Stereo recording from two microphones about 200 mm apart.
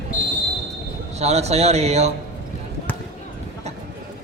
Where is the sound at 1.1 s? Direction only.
30° right (ahead or behind).